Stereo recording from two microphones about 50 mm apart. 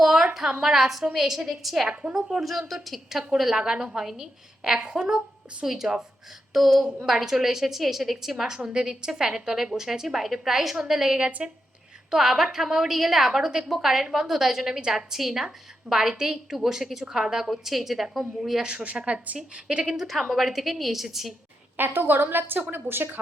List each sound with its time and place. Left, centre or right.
0.0 s a sound: centre
0.6 s a woman's voice: centre
1.9 s a woman's voice: right
2.1 s a woman's voice: centre
2.4 s a woman's voice: centre
3.5 s a woman's voice: centre
8.5 s a woman's voice: centre
11.2 s a woman's voice: right
12.1 s a woman's voice: centre
18.6 s a woman's voice: right
20.0 s a woman's voice: centre
21.8 s a woman's voice: right